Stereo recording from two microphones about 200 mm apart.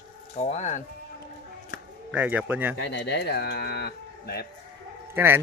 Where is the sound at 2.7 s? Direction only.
60° left (ahead or behind).